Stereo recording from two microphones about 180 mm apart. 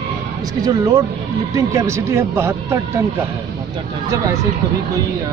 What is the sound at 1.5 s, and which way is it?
Speech, 15° right (ahead or behind).